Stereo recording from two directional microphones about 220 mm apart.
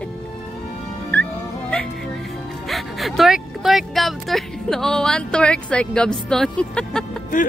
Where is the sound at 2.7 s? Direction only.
Centre (ahead or behind).